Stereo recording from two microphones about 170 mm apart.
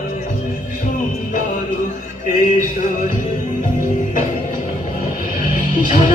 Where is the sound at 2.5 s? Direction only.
50° left (ahead or behind).